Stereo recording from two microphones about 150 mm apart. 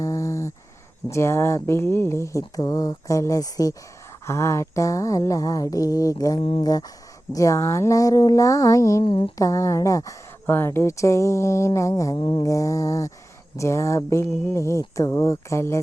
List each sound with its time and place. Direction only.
0.0 s a sound: 20° left (ahead or behind)
1.0 s speech: 20° left (ahead or behind)
6.4 s speech: 35° left (ahead or behind)
6.7 s speech: 25° left (ahead or behind)
9.0 s speech: 35° left (ahead or behind)
9.4 s speech: 20° left (ahead or behind)